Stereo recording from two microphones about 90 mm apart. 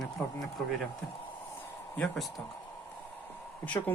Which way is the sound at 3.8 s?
35° left (ahead or behind).